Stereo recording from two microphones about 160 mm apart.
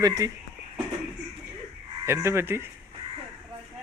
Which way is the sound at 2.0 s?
15° right (ahead or behind).